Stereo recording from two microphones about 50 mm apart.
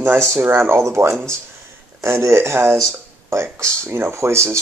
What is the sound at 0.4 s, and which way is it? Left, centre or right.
Speech, right.